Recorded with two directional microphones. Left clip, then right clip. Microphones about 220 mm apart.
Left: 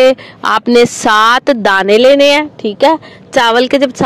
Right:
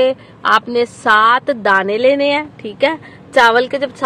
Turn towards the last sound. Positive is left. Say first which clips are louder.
# left 3 dB
turn(degrees=35)  # may be behind; listen again after turning